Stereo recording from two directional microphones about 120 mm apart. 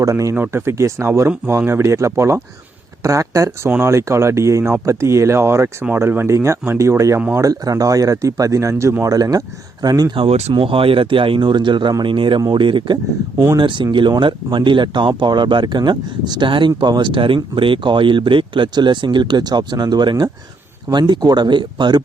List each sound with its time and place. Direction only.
0.0 s speech: 25° right (ahead or behind)
10.2 s speech: 60° right (ahead or behind)
10.5 s speech: 50° right (ahead or behind)